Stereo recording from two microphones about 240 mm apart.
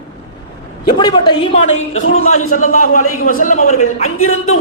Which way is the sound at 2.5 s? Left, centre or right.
Left.